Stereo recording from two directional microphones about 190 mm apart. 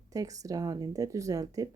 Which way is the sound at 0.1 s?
20° right (ahead or behind).